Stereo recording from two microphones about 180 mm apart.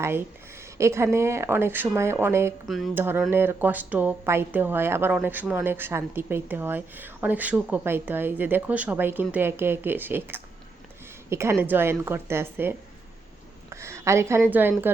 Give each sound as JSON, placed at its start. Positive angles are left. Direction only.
{"t": 0.8, "sound": "speech", "side_deg": -15}
{"t": 2.6, "sound": "a sound", "side_deg": 0}
{"t": 2.9, "sound": "a woman's voice", "side_deg": -10}